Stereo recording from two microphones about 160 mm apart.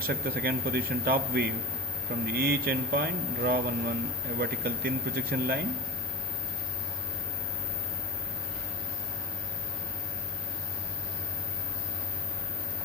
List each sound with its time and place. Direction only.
0.0 s speech: 70° right (ahead or behind)